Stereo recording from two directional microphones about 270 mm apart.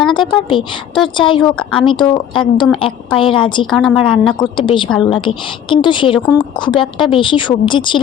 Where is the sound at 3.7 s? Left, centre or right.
Centre.